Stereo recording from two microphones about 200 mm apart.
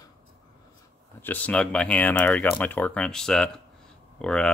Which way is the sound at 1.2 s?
10° left (ahead or behind).